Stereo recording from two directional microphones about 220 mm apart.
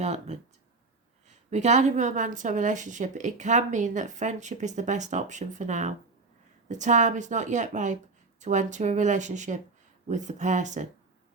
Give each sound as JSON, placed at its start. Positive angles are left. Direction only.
{"t": 0.0, "sound": "a woman's voice", "side_deg": -30}